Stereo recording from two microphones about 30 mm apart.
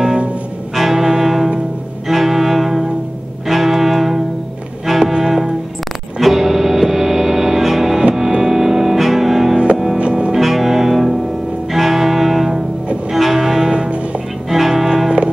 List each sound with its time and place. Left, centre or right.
0.7 s brass instrument: centre
2.0 s bowed string instrument: centre
3.4 s music: centre
5.2 s music: centre
9.9 s music: right
10.3 s music: centre
13.7 s music: right
14.5 s music: centre
15.0 s music: right